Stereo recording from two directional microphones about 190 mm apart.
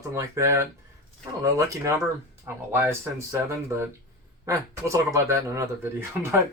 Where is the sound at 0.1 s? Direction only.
15° right (ahead or behind).